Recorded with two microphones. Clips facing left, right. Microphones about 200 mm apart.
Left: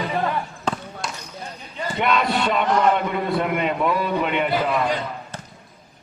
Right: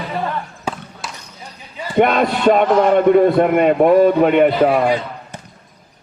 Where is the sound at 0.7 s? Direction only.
10° right (ahead or behind).